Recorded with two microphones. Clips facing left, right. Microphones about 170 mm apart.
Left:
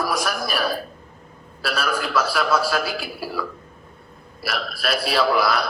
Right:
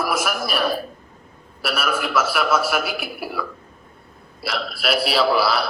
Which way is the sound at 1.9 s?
20° right (ahead or behind).